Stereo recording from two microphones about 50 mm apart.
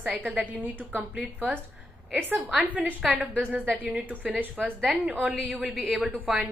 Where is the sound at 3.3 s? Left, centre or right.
Right.